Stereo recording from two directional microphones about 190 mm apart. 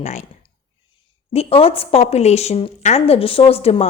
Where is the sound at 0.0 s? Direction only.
35° left (ahead or behind).